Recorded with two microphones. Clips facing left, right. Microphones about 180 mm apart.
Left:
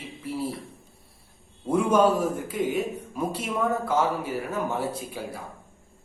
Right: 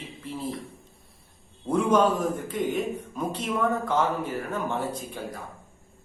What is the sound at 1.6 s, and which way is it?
Speech, 10° left (ahead or behind).